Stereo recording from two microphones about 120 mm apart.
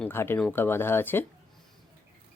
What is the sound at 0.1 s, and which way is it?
Speech, 20° left (ahead or behind).